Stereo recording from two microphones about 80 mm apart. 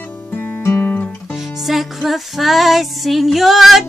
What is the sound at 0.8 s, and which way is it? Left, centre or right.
Guitar, centre.